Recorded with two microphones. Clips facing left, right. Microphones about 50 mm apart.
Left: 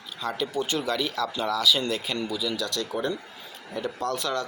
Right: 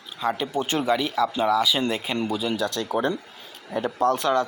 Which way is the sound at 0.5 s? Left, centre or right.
Right.